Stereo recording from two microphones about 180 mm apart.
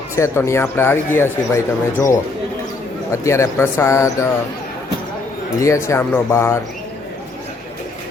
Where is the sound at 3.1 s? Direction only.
15° left (ahead or behind).